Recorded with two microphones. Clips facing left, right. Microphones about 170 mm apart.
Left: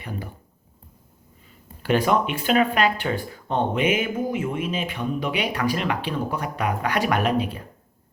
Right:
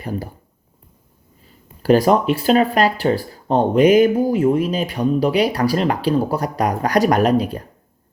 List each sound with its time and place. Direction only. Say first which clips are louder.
0.0 s speech: right 7 dB; 40° right (ahead or behind)
1.8 s speech: right 7 dB; 40° right (ahead or behind)